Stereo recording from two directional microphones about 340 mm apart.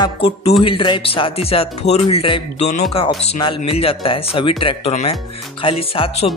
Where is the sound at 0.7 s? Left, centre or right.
Centre.